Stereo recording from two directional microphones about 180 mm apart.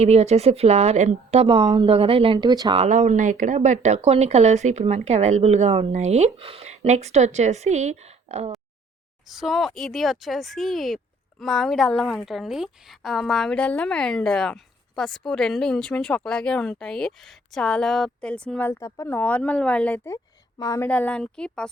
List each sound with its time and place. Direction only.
0.0 s speech: 35° right (ahead or behind)
2.8 s speech: 40° right (ahead or behind)
9.3 s speech: centre (ahead or behind)
20.6 s speech: 20° left (ahead or behind)
20.8 s speech: 5° left (ahead or behind)